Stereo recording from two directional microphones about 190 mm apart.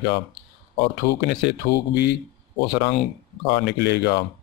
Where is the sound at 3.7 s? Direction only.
60° left (ahead or behind).